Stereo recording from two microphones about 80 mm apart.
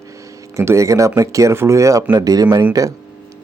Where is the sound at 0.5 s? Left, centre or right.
Right.